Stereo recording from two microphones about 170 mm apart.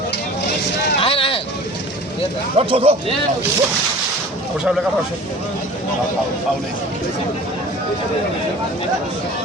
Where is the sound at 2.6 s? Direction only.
35° right (ahead or behind).